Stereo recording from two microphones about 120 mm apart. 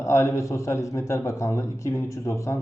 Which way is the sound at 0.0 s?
25° left (ahead or behind).